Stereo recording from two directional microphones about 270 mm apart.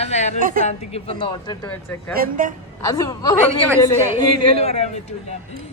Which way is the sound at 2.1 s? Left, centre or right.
Right.